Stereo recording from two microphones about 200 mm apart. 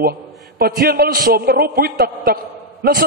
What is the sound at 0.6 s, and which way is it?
A man's voice, 45° right (ahead or behind).